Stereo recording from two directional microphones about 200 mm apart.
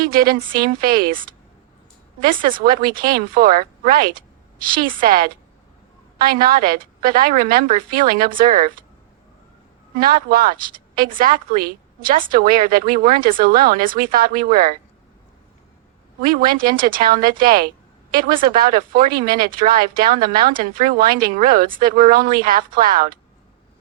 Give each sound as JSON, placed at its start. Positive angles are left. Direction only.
{"t": 0.0, "sound": "speech", "side_deg": -45}
{"t": 2.2, "sound": "speech", "side_deg": -45}
{"t": 10.0, "sound": "speech", "side_deg": -45}
{"t": 16.2, "sound": "speech", "side_deg": -45}